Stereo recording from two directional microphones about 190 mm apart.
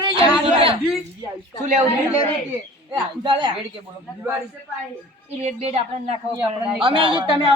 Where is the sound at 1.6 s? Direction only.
40° right (ahead or behind).